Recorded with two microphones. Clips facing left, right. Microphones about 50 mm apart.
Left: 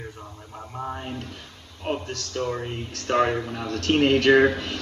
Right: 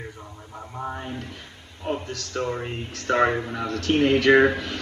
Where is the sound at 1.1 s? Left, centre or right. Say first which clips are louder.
Even; right.